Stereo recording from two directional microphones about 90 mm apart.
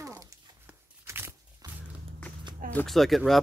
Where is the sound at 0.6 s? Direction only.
25° right (ahead or behind).